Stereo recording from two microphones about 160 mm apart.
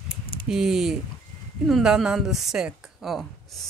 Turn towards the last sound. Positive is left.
turn(degrees=0)  # may be behind; listen again after turning